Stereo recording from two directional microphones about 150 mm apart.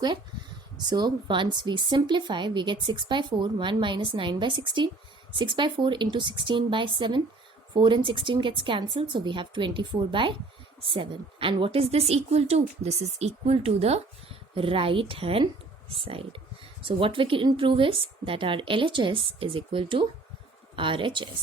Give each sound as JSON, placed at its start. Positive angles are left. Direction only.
{"t": 0.9, "sound": "a woman's voice", "side_deg": -30}